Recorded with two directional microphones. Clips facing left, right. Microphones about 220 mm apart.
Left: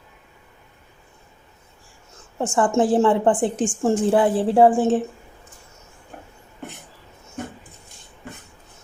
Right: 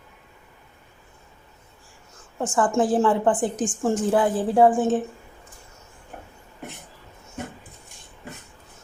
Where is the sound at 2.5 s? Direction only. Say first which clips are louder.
Left 2 dB; 25° left (ahead or behind).